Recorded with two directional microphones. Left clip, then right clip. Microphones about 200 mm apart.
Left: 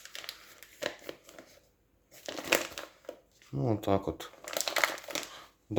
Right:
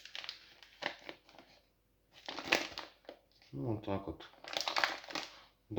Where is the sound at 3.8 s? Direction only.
55° left (ahead or behind).